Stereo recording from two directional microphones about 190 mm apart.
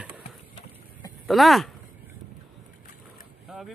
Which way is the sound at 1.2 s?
Centre (ahead or behind).